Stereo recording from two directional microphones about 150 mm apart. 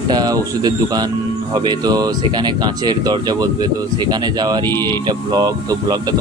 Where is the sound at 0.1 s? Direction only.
25° right (ahead or behind).